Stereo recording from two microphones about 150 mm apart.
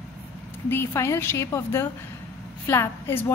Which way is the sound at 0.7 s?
15° left (ahead or behind).